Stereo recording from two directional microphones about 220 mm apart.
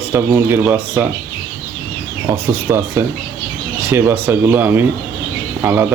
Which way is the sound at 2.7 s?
10° right (ahead or behind).